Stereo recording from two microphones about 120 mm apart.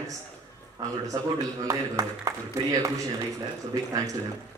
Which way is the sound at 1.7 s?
25° right (ahead or behind).